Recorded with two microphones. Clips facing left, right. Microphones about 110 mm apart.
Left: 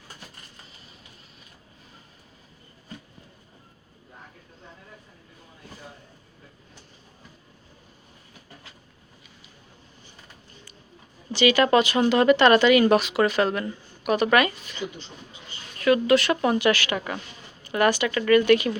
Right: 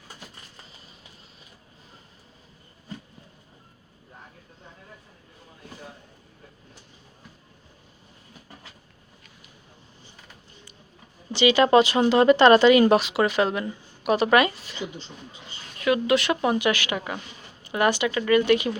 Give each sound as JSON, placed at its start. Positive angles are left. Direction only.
{"t": 11.3, "sound": "a woman's voice", "side_deg": -25}